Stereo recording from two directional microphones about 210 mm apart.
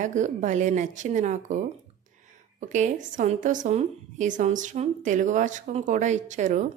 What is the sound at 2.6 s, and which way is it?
A woman's voice, 35° right (ahead or behind).